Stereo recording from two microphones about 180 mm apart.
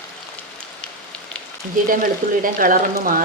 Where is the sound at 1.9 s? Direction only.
50° right (ahead or behind).